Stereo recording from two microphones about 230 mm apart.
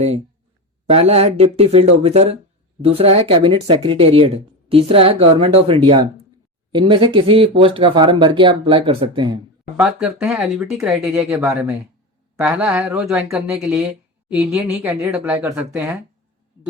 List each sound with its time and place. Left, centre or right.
0.9 s speech: right
9.7 s speech: centre